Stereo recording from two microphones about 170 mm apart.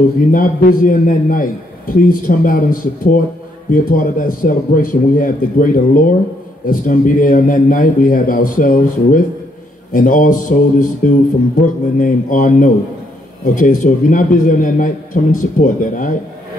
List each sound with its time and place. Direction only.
0.3 s a man's voice: 55° left (ahead or behind)